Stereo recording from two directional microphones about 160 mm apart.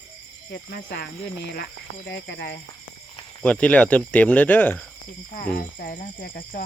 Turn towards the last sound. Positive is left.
turn(degrees=65)  # may be behind; listen again after turning